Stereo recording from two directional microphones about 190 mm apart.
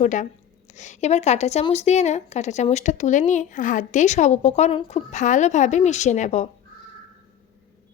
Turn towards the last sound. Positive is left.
turn(degrees=40)  # may be behind; listen again after turning